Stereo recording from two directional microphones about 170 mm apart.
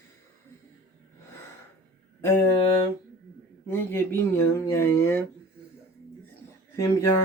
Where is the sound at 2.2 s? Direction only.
15° left (ahead or behind).